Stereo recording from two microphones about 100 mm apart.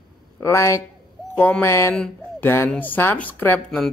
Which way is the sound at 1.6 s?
30° left (ahead or behind).